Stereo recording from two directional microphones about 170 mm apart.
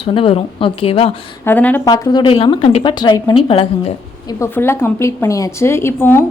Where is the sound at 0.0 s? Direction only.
30° left (ahead or behind).